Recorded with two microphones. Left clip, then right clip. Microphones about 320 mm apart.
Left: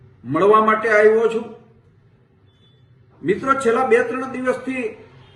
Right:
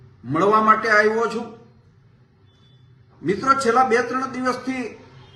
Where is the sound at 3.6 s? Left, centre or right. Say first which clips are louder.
Left 3 dB; right.